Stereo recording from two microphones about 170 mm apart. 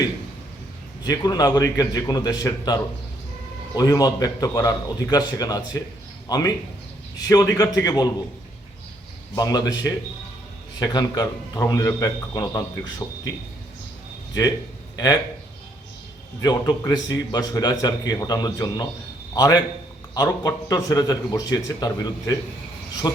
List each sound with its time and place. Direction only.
1.0 s a man's voice: 20° left (ahead or behind)
9.3 s a man's voice: 20° left (ahead or behind)
14.9 s speech: 20° left (ahead or behind)
16.4 s a man's voice: 25° left (ahead or behind)